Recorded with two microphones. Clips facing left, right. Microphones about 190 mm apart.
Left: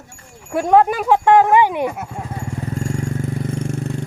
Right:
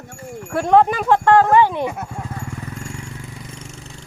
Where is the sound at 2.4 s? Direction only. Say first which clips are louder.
Left 6 dB; 30° left (ahead or behind); by 4.1 s 55° left (ahead or behind).